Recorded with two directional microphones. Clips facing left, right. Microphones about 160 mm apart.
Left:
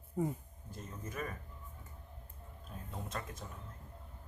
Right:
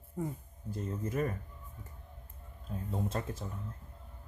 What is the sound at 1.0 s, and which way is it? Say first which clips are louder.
Speech: right 8 dB; 30° right (ahead or behind).